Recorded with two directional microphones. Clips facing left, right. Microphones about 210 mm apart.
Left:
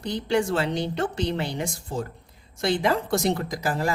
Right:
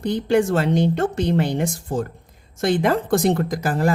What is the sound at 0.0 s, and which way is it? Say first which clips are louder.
Speech: right 6 dB; 50° right (ahead or behind).